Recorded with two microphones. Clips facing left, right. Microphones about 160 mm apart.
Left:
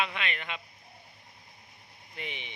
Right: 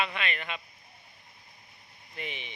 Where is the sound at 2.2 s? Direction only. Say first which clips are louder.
Right 1 dB; 20° left (ahead or behind).